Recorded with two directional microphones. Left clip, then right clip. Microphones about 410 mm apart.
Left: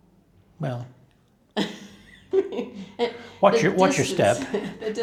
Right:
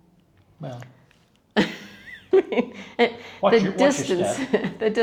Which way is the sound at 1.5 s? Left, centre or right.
Right.